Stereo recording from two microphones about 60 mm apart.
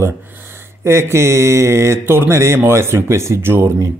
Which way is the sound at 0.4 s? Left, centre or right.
Right.